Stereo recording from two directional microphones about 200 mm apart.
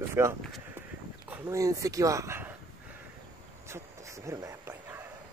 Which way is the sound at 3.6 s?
15° right (ahead or behind).